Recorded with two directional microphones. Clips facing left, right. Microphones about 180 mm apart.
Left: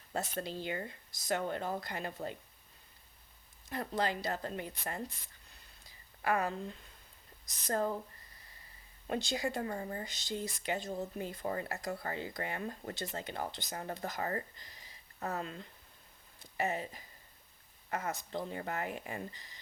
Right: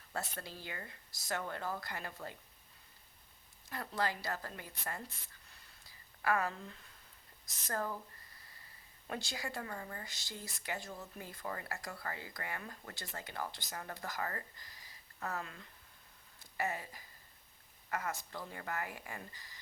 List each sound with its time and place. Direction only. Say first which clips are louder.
0.1 s speech: left 6 dB; 20° left (ahead or behind)
3.7 s speech: left 3 dB; 20° left (ahead or behind)
6.2 s speech: left 2 dB; 20° left (ahead or behind)
9.0 s speech: left 7 dB; 20° left (ahead or behind)